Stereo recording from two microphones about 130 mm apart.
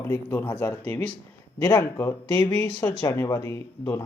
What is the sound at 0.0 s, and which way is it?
A woman's voice, 20° left (ahead or behind).